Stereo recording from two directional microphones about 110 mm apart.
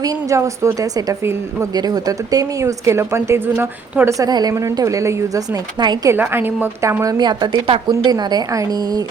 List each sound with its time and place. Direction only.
0.0 s a woman's voice: 30° right (ahead or behind)
4.3 s a woman's voice: 40° right (ahead or behind)
6.1 s a woman's voice: 20° right (ahead or behind)
7.0 s a woman's voice: 35° right (ahead or behind)